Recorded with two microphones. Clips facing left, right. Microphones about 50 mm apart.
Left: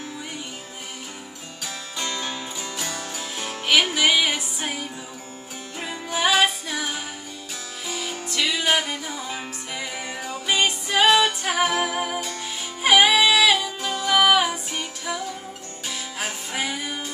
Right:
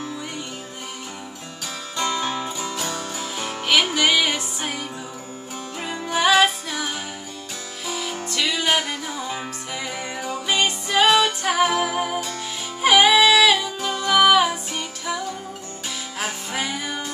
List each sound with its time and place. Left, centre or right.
2.0 s music: centre